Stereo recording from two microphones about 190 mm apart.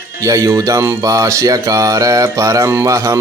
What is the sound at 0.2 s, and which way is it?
Speech, 15° right (ahead or behind).